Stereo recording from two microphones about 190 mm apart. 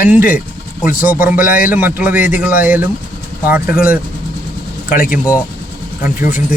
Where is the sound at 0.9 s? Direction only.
45° left (ahead or behind).